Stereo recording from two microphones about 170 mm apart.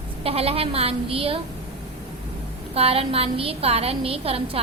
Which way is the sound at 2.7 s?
35° right (ahead or behind).